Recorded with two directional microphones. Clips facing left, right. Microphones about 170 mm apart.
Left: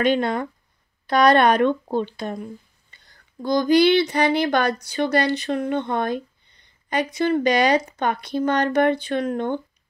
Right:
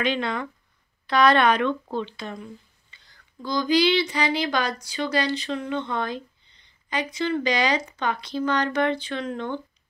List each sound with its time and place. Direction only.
0.0 s speech: 45° left (ahead or behind)